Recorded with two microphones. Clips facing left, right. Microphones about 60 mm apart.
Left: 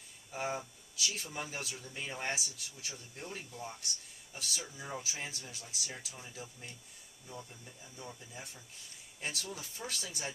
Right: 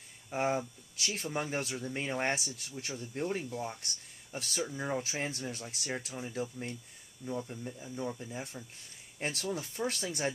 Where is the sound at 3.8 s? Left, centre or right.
Right.